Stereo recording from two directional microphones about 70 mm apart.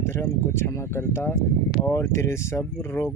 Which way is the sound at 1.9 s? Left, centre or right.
Left.